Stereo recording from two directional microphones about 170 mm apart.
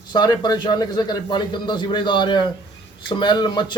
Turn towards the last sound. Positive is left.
turn(degrees=25)  # may be behind; listen again after turning